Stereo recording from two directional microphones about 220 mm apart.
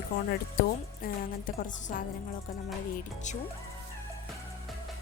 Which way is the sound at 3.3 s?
30° left (ahead or behind).